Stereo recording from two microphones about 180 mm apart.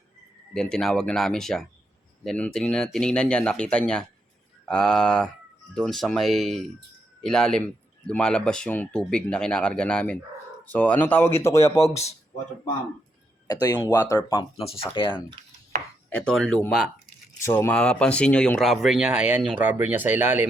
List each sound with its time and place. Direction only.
0.5 s speech: 5° left (ahead or behind)
11.8 s speech: 35° left (ahead or behind)
13.5 s speech: 20° left (ahead or behind)
14.5 s speech: 35° left (ahead or behind)
16.0 s speech: 5° left (ahead or behind)
17.4 s speech: 15° left (ahead or behind); by 20.5 s 10° right (ahead or behind)